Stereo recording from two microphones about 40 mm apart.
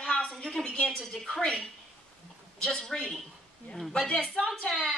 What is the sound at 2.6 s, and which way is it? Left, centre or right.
A woman's voice, left.